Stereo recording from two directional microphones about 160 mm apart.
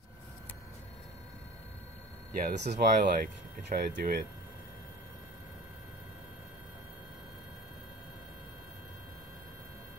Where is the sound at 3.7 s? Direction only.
80° right.